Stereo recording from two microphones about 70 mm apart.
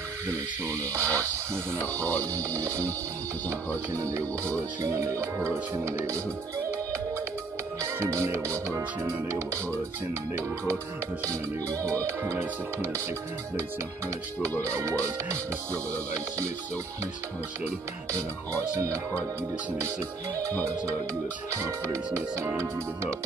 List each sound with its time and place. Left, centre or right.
0.3 s speech: right
7.8 s speech: right
11.2 s speech: right
14.6 s speech: right